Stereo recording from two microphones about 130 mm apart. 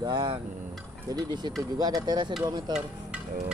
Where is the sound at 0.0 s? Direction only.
35° right (ahead or behind).